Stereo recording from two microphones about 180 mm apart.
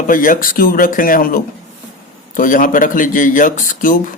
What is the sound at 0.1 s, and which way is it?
A man's voice, 50° left (ahead or behind).